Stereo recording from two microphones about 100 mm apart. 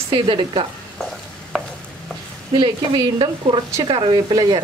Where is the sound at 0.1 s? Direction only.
55° right (ahead or behind).